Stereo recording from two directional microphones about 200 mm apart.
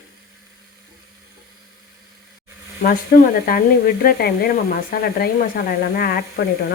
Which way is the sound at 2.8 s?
45° left (ahead or behind).